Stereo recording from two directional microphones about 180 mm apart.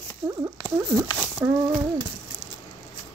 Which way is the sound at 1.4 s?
10° right (ahead or behind).